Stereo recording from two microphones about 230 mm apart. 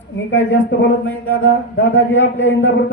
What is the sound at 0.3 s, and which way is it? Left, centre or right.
Speech, left.